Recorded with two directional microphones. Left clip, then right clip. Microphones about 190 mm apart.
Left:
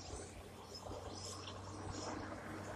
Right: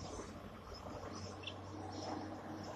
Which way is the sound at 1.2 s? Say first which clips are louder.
Right 1 dB; 35° left (ahead or behind).